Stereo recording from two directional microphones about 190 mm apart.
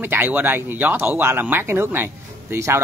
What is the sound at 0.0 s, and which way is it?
Speech, 10° right (ahead or behind).